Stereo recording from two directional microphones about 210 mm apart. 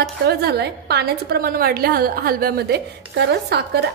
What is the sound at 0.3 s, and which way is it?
A woman's voice, 50° right (ahead or behind).